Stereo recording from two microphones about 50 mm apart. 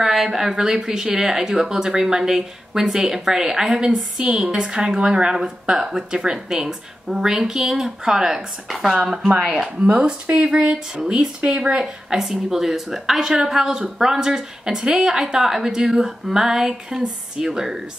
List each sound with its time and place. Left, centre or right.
0.0 s a woman's voice: centre
8.9 s a woman's voice: centre
11.8 s a woman's voice: centre